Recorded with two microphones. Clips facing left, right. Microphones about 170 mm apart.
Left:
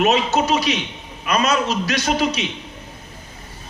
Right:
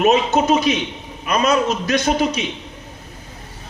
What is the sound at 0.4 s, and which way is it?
A man's voice, 50° right (ahead or behind).